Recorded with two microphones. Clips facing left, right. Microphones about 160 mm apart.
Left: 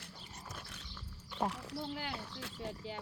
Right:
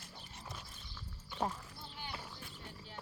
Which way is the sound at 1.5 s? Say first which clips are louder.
Left 9 dB; 85° left.